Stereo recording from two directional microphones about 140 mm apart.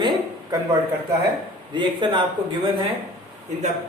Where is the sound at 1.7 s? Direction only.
35° right (ahead or behind).